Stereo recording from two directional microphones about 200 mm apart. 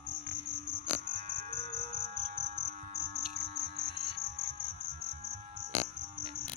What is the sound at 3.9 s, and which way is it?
Music, 55° right (ahead or behind).